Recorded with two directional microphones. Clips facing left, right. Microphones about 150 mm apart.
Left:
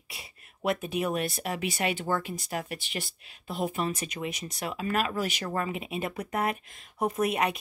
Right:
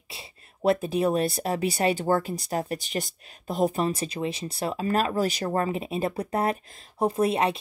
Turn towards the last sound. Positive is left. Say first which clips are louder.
# right 4 dB
turn(degrees=-30)  # may be behind; listen again after turning